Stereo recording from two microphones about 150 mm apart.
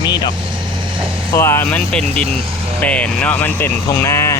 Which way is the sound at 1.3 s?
15° left (ahead or behind).